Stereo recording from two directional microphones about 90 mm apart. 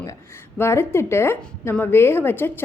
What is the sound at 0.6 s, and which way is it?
A woman's voice, 30° left (ahead or behind).